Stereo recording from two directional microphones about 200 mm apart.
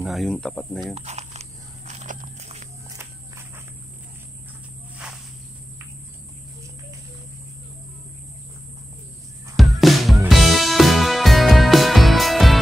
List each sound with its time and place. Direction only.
0.0 s speech: centre (ahead or behind)
0.9 s a sound: 35° right (ahead or behind)
4.9 s cricket: centre (ahead or behind)
9.6 s music: centre (ahead or behind)